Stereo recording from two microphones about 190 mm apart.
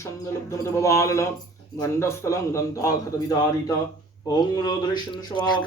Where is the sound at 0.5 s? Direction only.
15° left (ahead or behind).